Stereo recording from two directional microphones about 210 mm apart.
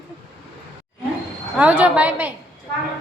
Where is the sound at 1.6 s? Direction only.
5° right (ahead or behind).